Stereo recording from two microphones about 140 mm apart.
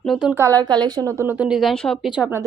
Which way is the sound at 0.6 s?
30° right (ahead or behind).